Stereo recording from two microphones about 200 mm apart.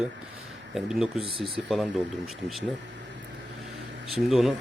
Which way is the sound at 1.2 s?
25° right (ahead or behind).